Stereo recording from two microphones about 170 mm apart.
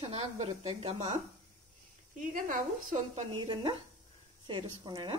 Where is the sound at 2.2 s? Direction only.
50° right (ahead or behind); by 5.1 s 25° right (ahead or behind).